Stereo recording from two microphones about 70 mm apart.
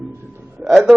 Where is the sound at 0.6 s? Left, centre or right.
Centre.